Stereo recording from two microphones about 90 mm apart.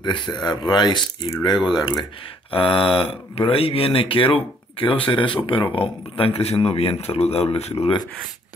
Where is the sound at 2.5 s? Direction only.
85° left.